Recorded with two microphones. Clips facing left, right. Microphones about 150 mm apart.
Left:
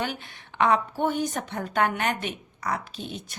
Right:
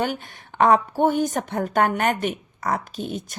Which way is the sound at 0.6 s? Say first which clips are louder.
Right 5 dB; 45° right (ahead or behind).